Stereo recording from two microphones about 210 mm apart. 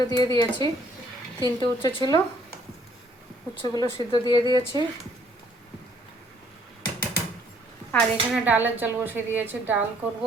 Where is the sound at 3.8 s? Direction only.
20° left (ahead or behind).